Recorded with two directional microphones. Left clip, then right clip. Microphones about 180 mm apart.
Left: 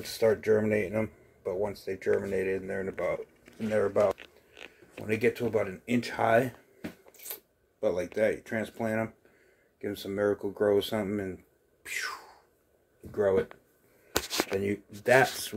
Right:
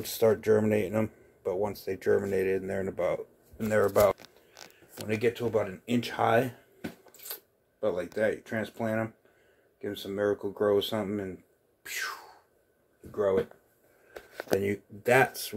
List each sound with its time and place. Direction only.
0.0 s speech: 15° right (ahead or behind)
5.0 s speech: 10° left (ahead or behind)
11.8 s a sound: centre (ahead or behind)
13.1 s speech: 20° left (ahead or behind)
14.5 s speech: centre (ahead or behind)